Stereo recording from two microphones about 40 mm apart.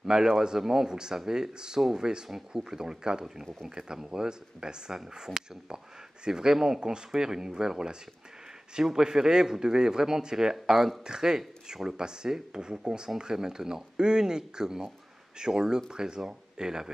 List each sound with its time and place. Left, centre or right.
0.0 s a man's voice: centre